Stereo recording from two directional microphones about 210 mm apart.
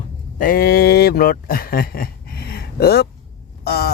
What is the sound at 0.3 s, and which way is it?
Speech, 40° left (ahead or behind).